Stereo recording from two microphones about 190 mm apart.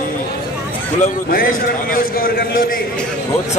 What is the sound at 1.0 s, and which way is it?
A man's voice, 50° left (ahead or behind).